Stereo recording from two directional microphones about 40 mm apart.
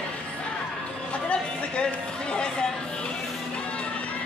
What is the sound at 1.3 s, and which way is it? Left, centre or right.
Chatter, left.